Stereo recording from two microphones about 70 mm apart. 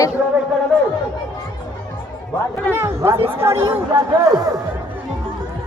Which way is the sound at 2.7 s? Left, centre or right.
Right.